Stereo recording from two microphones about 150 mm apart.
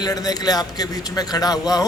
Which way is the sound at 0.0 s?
25° left (ahead or behind).